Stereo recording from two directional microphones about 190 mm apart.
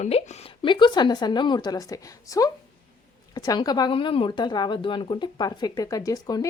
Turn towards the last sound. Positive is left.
turn(degrees=20)  # may be behind; listen again after turning